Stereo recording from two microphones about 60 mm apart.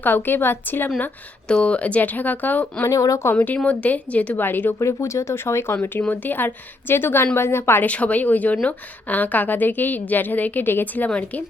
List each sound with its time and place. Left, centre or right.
0.0 s a woman's voice: left
1.6 s a woman's voice: left
2.8 s speech: left
3.3 s a woman's voice: left
4.4 s a woman's voice: left
4.8 s speech: left
5.7 s a woman's voice: left
7.9 s a woman's voice: left